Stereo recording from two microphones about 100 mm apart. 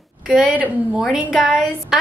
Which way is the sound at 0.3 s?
10° right (ahead or behind).